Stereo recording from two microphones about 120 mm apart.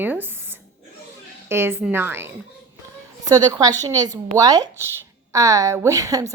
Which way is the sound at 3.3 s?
30° right (ahead or behind).